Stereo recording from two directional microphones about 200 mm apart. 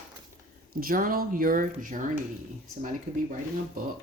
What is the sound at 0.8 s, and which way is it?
Speech, 45° right (ahead or behind).